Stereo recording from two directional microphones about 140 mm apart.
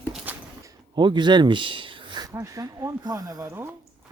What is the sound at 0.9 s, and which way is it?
Speech, 35° right (ahead or behind).